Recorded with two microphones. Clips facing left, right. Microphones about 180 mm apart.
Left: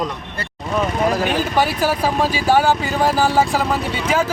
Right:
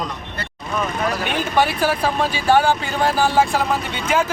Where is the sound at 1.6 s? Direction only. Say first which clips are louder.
Right 1 dB; 10° left (ahead or behind).